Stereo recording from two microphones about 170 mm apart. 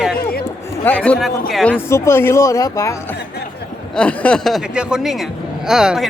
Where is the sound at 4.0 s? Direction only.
5° left (ahead or behind).